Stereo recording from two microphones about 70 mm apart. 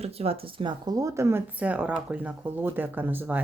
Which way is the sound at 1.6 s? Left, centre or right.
Centre.